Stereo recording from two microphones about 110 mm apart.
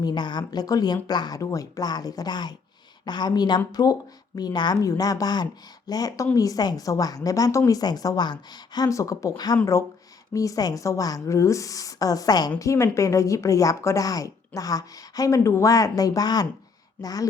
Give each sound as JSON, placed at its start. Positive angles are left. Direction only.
{"t": 0.0, "sound": "a woman's voice", "side_deg": 40}
{"t": 10.3, "sound": "a woman's voice", "side_deg": 30}